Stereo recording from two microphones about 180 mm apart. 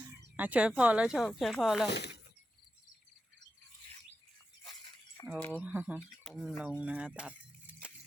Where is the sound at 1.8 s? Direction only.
70° left (ahead or behind).